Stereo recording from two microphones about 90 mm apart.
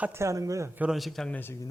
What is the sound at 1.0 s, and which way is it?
Speech, centre (ahead or behind).